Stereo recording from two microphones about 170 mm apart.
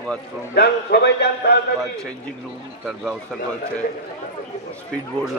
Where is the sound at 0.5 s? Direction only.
70° left (ahead or behind).